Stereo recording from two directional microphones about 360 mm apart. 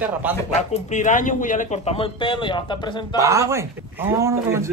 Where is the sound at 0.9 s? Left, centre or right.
Left.